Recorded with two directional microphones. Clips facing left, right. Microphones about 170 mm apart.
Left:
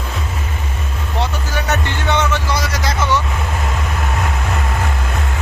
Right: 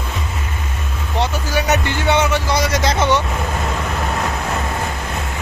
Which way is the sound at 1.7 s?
10° right (ahead or behind).